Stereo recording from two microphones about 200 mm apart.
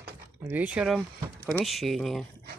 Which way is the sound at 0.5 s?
5° right (ahead or behind).